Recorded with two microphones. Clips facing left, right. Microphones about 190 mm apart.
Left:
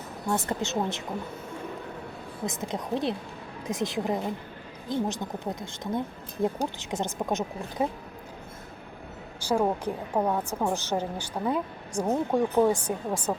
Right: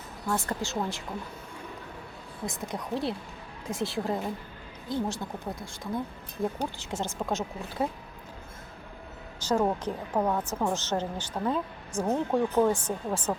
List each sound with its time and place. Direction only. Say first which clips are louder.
0.3 s speech: left 2 dB; 20° left (ahead or behind)
2.5 s a woman's voice: left 2 dB; 20° left (ahead or behind)
9.4 s a woman's voice: left 1 dB; 10° left (ahead or behind)